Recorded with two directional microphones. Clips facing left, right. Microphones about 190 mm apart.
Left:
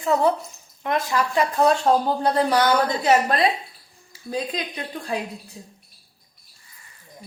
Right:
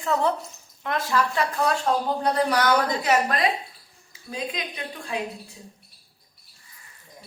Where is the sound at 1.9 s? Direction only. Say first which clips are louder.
Left 4 dB; 30° left (ahead or behind).